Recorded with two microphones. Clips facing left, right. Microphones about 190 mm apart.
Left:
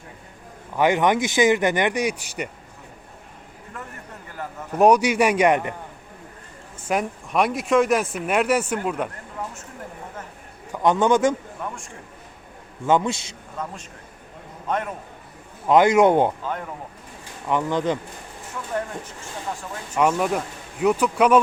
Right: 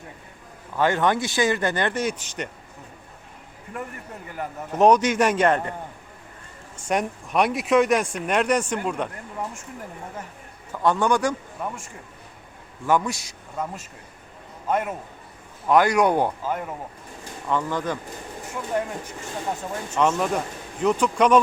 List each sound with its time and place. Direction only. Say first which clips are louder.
0.8 s speech: left 2 dB; 15° left (ahead or behind)
4.4 s a man's voice: right 2 dB; 15° right (ahead or behind)
4.7 s speech: left 1 dB; 10° left (ahead or behind)
6.7 s speech: even; 5° left (ahead or behind)
10.7 s a man's voice: left 3 dB; 20° left (ahead or behind)
12.8 s a man's voice: left 2 dB; 20° left (ahead or behind)
14.7 s a man's voice: right 2 dB; 5° right (ahead or behind)
15.6 s a man's voice: left 3 dB; 20° left (ahead or behind)
16.4 s a man's voice: right 2 dB; 5° right (ahead or behind)
17.5 s a man's voice: left 3 dB; 20° left (ahead or behind)
18.7 s a man's voice: right 2 dB; 10° right (ahead or behind)
20.0 s speech: left 1 dB; 10° left (ahead or behind)